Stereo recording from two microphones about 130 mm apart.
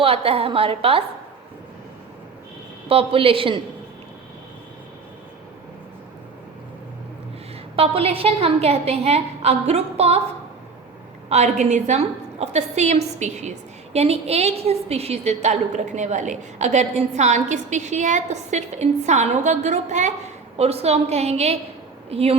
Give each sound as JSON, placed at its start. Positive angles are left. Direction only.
{"t": 0.0, "sound": "a woman's voice", "side_deg": -45}
{"t": 2.9, "sound": "a woman's voice", "side_deg": -45}
{"t": 7.8, "sound": "a woman's voice", "side_deg": -50}
{"t": 11.3, "sound": "a woman's voice", "side_deg": -60}
{"t": 20.6, "sound": "a woman's voice", "side_deg": -55}